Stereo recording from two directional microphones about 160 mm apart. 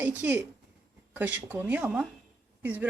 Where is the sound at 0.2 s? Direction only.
10° right (ahead or behind).